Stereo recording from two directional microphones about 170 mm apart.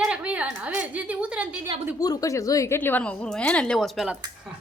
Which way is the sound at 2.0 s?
20° left (ahead or behind).